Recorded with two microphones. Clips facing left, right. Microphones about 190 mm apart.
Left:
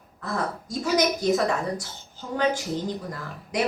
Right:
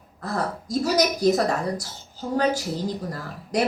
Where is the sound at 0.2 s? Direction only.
35° right (ahead or behind).